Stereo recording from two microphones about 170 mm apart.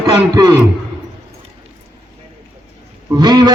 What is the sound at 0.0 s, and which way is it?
Speech, 20° right (ahead or behind).